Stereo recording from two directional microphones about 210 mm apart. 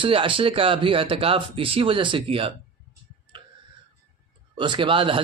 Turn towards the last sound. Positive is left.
turn(degrees=-25)  # may be behind; listen again after turning